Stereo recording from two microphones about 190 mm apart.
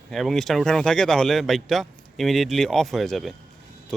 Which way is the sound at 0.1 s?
Centre (ahead or behind).